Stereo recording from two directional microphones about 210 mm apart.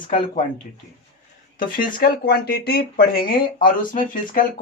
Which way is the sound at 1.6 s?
40° left (ahead or behind).